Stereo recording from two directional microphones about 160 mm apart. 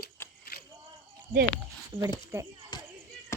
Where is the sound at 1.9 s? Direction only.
5° left (ahead or behind).